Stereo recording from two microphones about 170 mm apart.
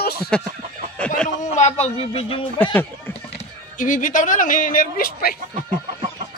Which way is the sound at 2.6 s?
10° left (ahead or behind).